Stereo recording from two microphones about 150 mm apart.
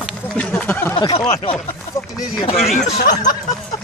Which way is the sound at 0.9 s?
30° left (ahead or behind).